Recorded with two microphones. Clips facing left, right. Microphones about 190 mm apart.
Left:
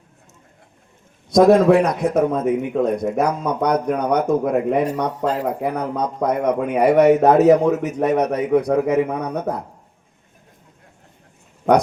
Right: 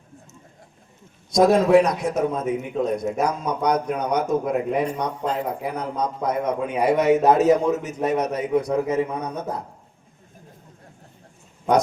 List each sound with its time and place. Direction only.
1.3 s speech: 60° left (ahead or behind)